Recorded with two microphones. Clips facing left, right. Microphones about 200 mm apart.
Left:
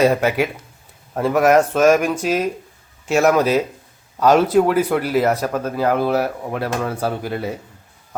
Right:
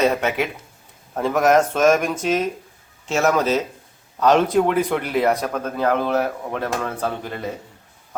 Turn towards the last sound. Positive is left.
turn(degrees=10)  # may be behind; listen again after turning